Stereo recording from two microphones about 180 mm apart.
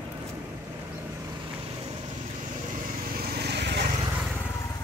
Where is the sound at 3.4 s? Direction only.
65° right (ahead or behind).